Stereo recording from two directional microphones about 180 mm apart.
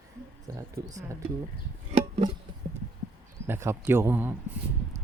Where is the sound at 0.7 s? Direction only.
20° right (ahead or behind).